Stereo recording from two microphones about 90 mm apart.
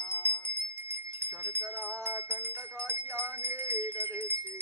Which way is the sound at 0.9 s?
30° right (ahead or behind).